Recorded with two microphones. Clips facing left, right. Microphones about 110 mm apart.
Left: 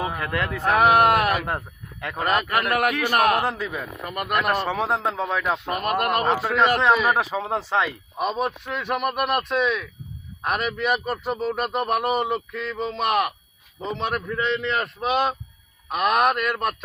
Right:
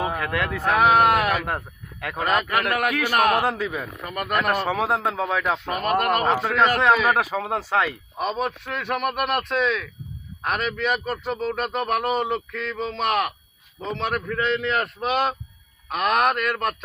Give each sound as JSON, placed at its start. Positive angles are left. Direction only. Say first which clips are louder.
{"t": 0.1, "sound": "a man's voice", "louder": "right 1 dB", "side_deg": 0}
{"t": 2.8, "sound": "a man's voice", "louder": "left 1 dB", "side_deg": 15}
{"t": 3.3, "sound": "speech", "louder": "right 2 dB", "side_deg": -10}
{"t": 4.1, "sound": "a man's voice", "louder": "even", "side_deg": 10}
{"t": 4.7, "sound": "a man's voice", "louder": "right 1 dB", "side_deg": -5}